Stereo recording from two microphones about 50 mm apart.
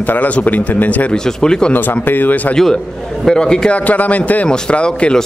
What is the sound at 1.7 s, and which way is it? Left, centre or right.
Speech, left.